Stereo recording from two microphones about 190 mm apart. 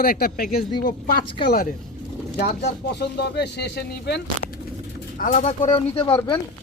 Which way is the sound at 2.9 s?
60° left (ahead or behind).